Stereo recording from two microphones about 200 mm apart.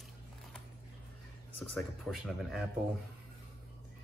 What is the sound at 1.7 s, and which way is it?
Speech, centre (ahead or behind).